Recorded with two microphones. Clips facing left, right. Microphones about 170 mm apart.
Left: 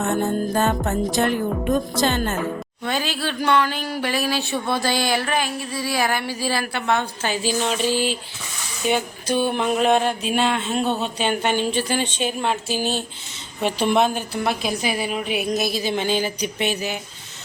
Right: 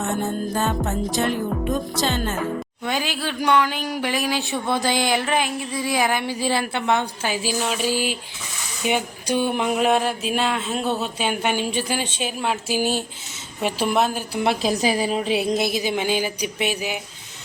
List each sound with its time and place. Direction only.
0.5 s music: 55° left (ahead or behind)
2.0 s speech: 50° left (ahead or behind)
2.8 s speech: 15° right (ahead or behind)
14.4 s a woman's voice: 30° right (ahead or behind); by 17.0 s 10° right (ahead or behind)